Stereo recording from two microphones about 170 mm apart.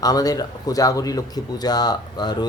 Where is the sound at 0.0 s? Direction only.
20° left (ahead or behind).